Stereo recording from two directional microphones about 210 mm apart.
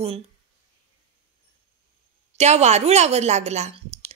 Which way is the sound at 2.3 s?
30° right (ahead or behind).